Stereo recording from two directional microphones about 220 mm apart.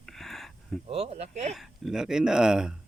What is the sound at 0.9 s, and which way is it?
Speech, 30° right (ahead or behind).